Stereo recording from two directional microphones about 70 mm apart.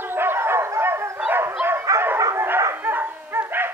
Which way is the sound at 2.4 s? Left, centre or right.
Right.